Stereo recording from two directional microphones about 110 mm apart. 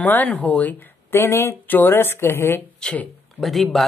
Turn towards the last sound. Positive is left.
turn(degrees=0)  # may be behind; listen again after turning